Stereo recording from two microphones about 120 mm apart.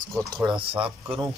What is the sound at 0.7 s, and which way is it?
Speech, 10° right (ahead or behind).